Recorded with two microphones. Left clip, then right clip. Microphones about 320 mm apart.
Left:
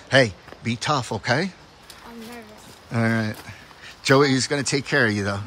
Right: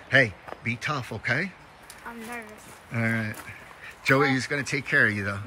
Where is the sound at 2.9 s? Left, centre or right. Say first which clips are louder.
Left 4 dB; centre.